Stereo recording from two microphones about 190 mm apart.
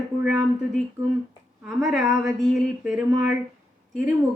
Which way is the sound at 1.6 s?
5° right (ahead or behind).